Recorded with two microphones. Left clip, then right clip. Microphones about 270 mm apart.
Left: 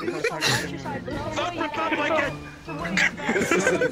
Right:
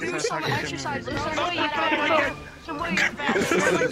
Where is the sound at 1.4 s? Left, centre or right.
Centre.